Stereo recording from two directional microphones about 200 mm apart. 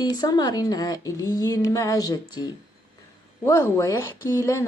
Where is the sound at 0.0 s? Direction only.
20° left (ahead or behind).